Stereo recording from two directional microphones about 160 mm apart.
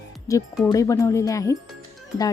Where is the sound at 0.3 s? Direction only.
20° left (ahead or behind).